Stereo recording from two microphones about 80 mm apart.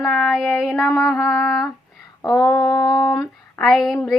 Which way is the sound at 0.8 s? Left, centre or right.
Left.